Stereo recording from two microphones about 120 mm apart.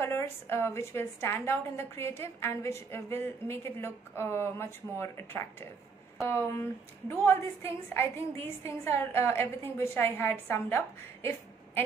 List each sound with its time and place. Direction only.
0.0 s a woman's voice: 20° left (ahead or behind)